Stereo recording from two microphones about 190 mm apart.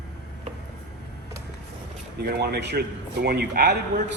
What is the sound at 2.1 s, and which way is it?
Speech, 60° right (ahead or behind).